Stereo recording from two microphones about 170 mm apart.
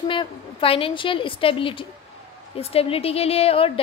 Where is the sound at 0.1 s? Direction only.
30° left (ahead or behind).